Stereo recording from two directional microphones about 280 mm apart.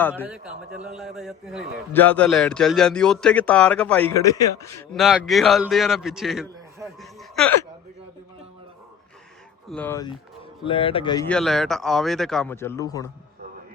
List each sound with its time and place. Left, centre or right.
0.2 s a man's voice: centre
9.6 s a man's voice: centre
11.3 s a man's voice: centre